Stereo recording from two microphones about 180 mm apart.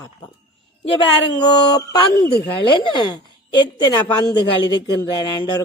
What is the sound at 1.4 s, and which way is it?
A woman's voice, 25° left (ahead or behind).